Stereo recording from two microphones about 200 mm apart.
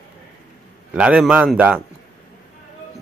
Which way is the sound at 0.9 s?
5° right (ahead or behind).